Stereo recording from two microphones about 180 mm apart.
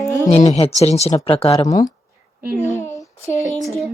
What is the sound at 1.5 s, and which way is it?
Speech, 20° left (ahead or behind).